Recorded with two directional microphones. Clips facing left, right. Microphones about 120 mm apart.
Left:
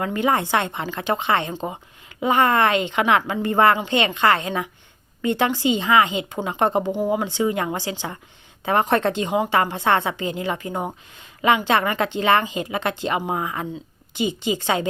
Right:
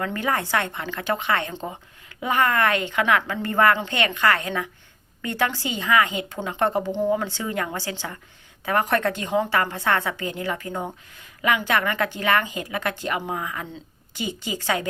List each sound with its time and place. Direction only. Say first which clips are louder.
0.0 s a woman's voice: left 4 dB; 20° left (ahead or behind)